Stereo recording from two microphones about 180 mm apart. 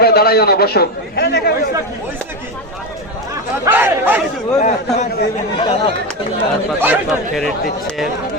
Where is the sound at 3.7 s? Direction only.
10° right (ahead or behind).